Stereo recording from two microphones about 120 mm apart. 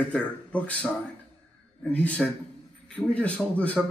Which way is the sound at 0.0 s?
10° left (ahead or behind).